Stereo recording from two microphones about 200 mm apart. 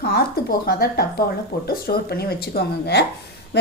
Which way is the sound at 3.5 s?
55° left (ahead or behind).